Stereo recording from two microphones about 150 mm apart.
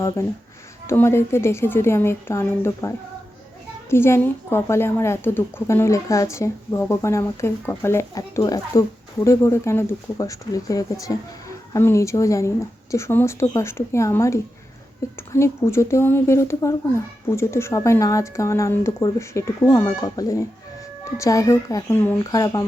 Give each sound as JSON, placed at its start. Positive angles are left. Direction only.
{"t": 0.2, "sound": "a woman's voice", "side_deg": 20}